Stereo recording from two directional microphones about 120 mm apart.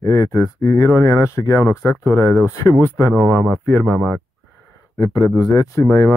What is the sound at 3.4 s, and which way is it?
Speech, centre (ahead or behind).